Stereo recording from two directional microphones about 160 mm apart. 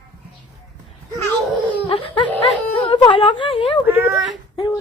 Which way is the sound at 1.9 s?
35° left (ahead or behind).